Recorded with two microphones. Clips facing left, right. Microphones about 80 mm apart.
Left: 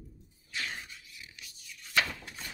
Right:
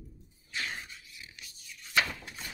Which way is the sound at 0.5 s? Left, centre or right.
Right.